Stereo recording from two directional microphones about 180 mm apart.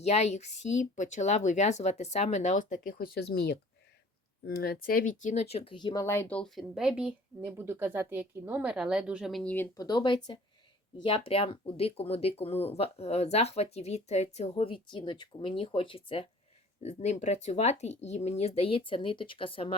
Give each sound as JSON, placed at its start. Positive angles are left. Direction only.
{"t": 0.0, "sound": "speech", "side_deg": 35}
{"t": 9.7, "sound": "speech", "side_deg": 25}